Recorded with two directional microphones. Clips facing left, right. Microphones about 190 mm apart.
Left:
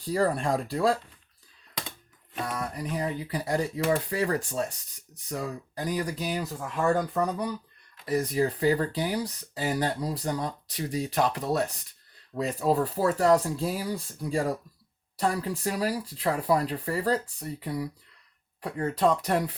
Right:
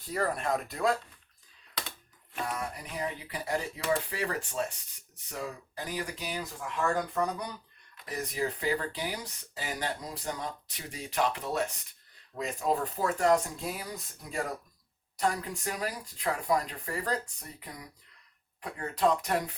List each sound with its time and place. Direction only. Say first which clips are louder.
0.0 s speech: left 6 dB; 30° left (ahead or behind)
2.4 s speech: left 3 dB; 35° left (ahead or behind)
8.0 s speech: left 8 dB; 35° left (ahead or behind)